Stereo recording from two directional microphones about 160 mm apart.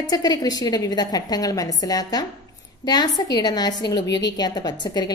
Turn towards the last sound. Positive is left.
turn(degrees=25)  # may be behind; listen again after turning